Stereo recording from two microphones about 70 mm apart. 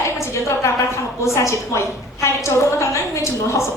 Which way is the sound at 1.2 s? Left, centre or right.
Left.